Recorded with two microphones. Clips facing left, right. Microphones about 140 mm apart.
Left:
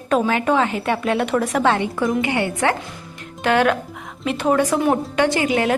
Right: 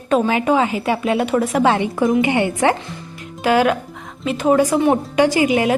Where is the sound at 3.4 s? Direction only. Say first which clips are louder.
Right 2 dB; 5° right (ahead or behind).